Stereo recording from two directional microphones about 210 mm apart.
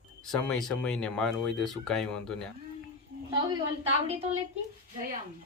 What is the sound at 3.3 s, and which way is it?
A woman's voice, 20° right (ahead or behind).